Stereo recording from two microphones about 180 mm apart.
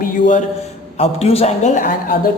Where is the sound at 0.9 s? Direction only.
35° left (ahead or behind).